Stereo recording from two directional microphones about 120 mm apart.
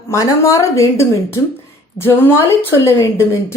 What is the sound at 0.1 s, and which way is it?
A woman's voice, 25° left (ahead or behind).